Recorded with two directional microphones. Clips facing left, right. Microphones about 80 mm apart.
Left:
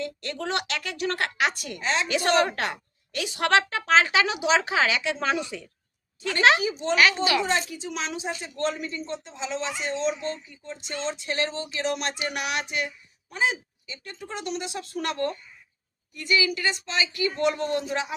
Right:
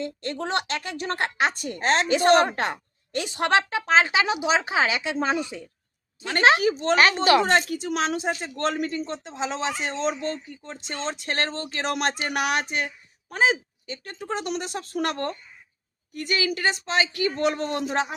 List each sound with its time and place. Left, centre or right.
0.0 s a woman's voice: right
1.8 s speech: right
2.0 s a woman's voice: right
6.9 s speech: right
7.4 s speech: right
11.1 s speech: right